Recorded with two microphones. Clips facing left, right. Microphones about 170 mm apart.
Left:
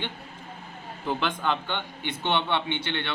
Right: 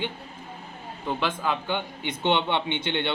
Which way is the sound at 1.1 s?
Centre (ahead or behind).